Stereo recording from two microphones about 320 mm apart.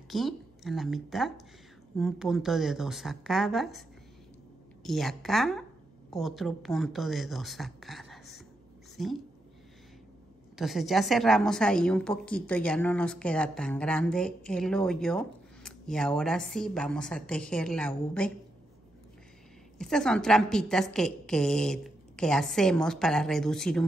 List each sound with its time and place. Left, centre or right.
0.1 s a woman's voice: centre
4.8 s speech: centre
10.5 s a woman's voice: centre
19.8 s a woman's voice: centre